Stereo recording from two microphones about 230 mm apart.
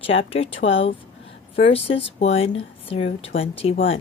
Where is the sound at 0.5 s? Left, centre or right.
Left.